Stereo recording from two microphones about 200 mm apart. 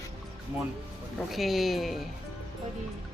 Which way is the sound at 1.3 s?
Centre (ahead or behind).